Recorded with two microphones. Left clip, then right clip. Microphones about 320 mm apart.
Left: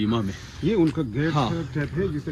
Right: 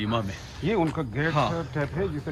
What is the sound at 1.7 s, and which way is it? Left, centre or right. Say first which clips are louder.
Speech: left 1 dB; centre.